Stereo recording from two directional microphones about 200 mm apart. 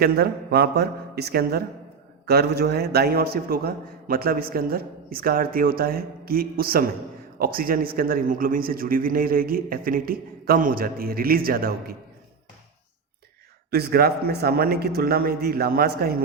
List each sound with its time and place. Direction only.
0.0 s a man's voice: 50° right (ahead or behind)
13.7 s a man's voice: 55° right (ahead or behind)